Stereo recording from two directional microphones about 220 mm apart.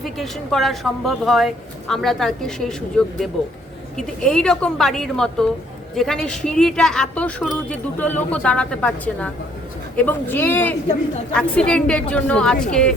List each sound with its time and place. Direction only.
0.0 s speech: centre (ahead or behind)